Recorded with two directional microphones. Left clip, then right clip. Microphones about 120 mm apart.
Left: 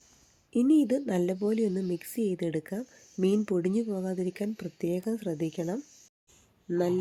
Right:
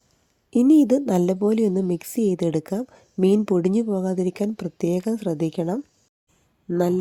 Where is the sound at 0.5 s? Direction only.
55° right (ahead or behind).